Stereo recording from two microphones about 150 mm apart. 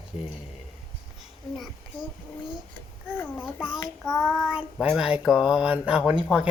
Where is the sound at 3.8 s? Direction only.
20° left (ahead or behind).